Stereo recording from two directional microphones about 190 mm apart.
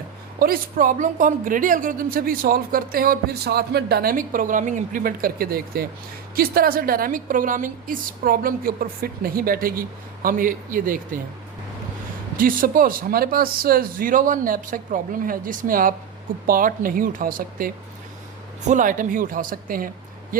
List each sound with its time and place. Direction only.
0.3 s a woman's voice: 50° right (ahead or behind)
12.4 s a woman's voice: 50° right (ahead or behind)
18.7 s a woman's voice: 45° right (ahead or behind)